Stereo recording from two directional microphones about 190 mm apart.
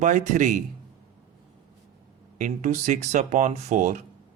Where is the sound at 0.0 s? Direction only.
40° right (ahead or behind).